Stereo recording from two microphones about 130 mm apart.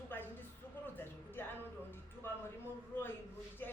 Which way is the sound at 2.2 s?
15° left (ahead or behind).